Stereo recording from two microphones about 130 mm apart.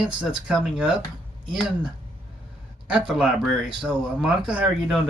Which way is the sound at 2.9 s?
5° right (ahead or behind).